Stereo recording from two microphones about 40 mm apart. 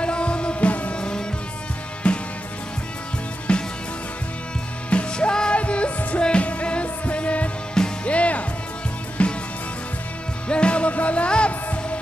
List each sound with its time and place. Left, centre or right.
0.0 s music: left
3.5 s music: left
4.8 s music: left
10.5 s music: left